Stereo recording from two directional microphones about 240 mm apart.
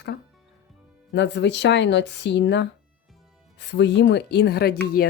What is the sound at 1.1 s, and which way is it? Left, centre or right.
Speech, left.